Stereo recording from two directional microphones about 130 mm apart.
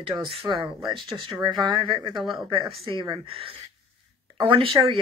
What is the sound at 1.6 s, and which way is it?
Speech, 35° right (ahead or behind).